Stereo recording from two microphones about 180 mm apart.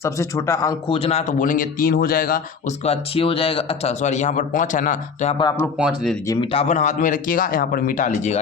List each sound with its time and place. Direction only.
0.0 s speech: 15° left (ahead or behind)
0.9 s speech: 35° left (ahead or behind); by 2.7 s 50° left (ahead or behind)
2.8 s speech: 35° left (ahead or behind)
5.7 s speech: 5° right (ahead or behind)
6.2 s speech: 20° left (ahead or behind)
6.5 s speech: 35° left (ahead or behind)